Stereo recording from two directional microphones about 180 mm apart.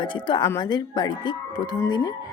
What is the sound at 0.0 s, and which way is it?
A woman's voice, 25° left (ahead or behind).